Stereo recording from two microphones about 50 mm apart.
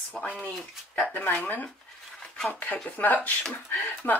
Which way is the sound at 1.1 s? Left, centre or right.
Left.